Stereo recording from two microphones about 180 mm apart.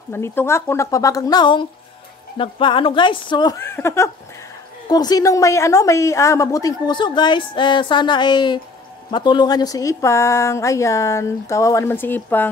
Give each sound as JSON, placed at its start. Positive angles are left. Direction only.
{"t": 0.1, "sound": "a woman's voice", "side_deg": 10}